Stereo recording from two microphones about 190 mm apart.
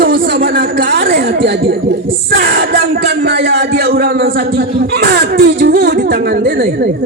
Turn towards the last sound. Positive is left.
turn(degrees=-55)  # may be behind; listen again after turning